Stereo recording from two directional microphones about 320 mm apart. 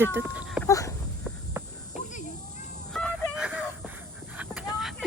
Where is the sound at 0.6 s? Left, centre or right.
Centre.